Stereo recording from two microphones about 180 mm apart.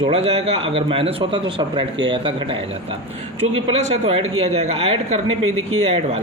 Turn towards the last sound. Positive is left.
turn(degrees=-35)  # may be behind; listen again after turning